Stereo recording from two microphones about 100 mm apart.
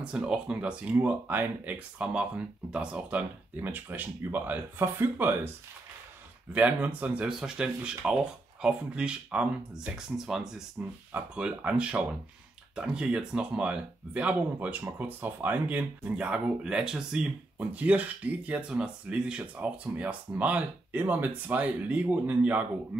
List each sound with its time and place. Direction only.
0.0 s speech: 10° right (ahead or behind)
6.5 s speech: 15° right (ahead or behind)